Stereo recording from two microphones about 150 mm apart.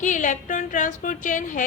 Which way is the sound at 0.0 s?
55° left (ahead or behind).